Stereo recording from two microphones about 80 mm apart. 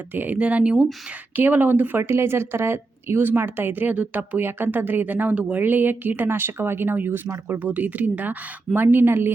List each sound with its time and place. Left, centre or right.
0.1 s speech: right